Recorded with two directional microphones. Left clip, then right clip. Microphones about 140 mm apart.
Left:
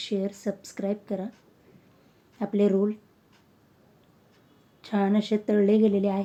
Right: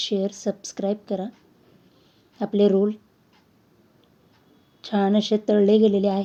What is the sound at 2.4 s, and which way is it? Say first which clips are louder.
Speech: right 5 dB; 25° right (ahead or behind).